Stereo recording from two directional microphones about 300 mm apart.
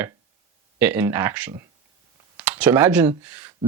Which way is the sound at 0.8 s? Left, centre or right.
Centre.